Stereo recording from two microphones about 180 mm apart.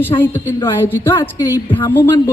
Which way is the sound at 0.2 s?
10° left (ahead or behind).